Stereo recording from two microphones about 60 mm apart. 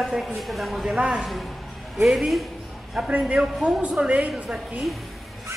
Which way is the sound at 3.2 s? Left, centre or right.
Centre.